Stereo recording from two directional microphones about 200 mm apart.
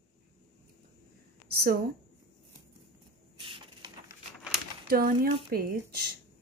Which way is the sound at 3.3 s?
25° right (ahead or behind).